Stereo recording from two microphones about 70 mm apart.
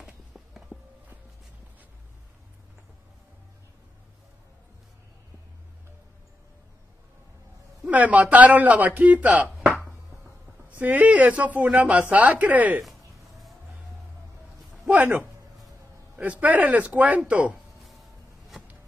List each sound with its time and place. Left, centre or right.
0.3 s walk: centre
7.8 s speech: right
9.7 s a sound: centre
10.7 s speech: right
16.2 s speech: right